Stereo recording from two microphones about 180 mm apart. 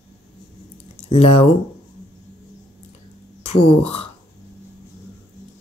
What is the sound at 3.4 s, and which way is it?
Speech, 35° left (ahead or behind).